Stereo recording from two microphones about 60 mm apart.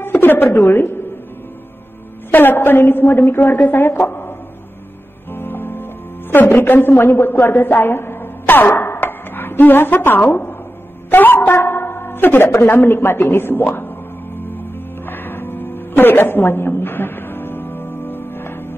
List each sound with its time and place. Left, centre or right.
0.0 s speech: left
2.3 s a woman's voice: left
5.3 s music: left
6.3 s a woman's voice: left
14.5 s music: left